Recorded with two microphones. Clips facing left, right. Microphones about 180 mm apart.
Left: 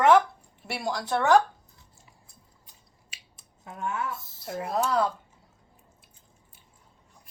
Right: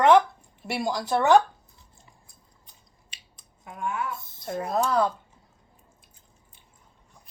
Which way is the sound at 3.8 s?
30° left (ahead or behind).